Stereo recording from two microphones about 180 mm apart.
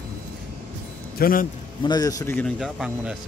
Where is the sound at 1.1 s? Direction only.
55° left (ahead or behind).